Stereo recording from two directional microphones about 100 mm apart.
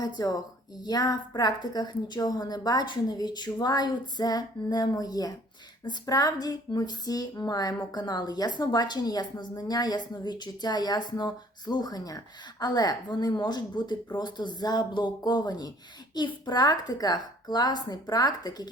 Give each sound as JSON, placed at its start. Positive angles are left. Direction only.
{"t": 0.0, "sound": "a woman's voice", "side_deg": 40}